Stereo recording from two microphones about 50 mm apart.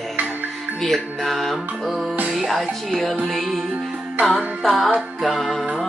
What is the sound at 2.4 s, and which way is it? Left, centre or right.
Speech, centre.